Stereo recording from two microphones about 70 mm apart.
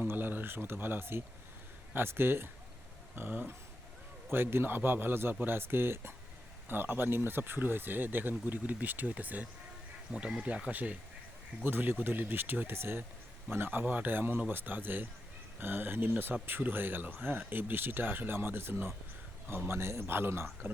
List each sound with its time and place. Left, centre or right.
0.0 s speech: right
10.1 s speech: centre; by 20.7 s right